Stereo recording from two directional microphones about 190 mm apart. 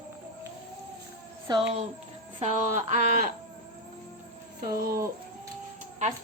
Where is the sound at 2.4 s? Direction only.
40° right (ahead or behind).